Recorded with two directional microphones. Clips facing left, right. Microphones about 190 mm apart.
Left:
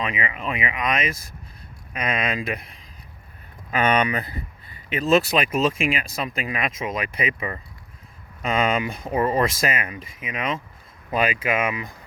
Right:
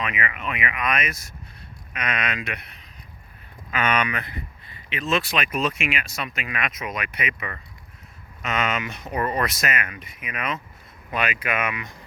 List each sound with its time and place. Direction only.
0.0 s speech: 25° left (ahead or behind)
3.7 s speech: 35° left (ahead or behind)